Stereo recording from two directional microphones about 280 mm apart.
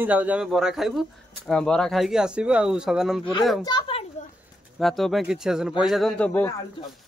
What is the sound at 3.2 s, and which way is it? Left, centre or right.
Speech, centre.